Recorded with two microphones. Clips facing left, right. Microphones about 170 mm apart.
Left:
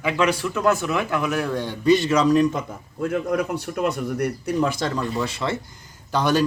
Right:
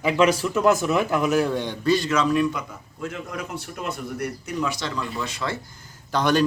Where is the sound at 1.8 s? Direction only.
20° left (ahead or behind); by 5.0 s 50° left (ahead or behind).